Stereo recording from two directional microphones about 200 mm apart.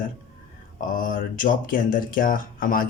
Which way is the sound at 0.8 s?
40° left (ahead or behind).